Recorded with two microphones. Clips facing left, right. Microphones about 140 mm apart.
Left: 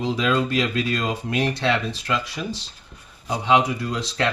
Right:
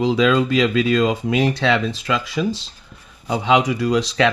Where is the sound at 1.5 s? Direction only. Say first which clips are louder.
Right 4 dB; 90° right.